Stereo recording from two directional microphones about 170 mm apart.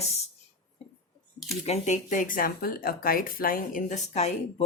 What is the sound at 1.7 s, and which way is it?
Speech, 45° left (ahead or behind).